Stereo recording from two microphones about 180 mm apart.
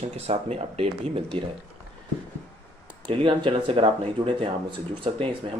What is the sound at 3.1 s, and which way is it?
Speech, 25° right (ahead or behind).